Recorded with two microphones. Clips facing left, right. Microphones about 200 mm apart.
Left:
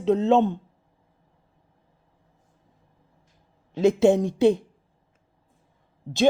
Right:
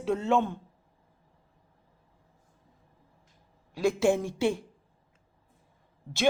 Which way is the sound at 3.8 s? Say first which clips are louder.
Left 7 dB; 20° left (ahead or behind).